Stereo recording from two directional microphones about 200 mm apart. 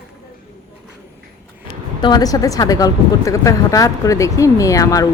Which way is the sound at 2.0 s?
20° left (ahead or behind).